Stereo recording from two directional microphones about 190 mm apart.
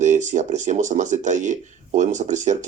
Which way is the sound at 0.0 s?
40° right (ahead or behind).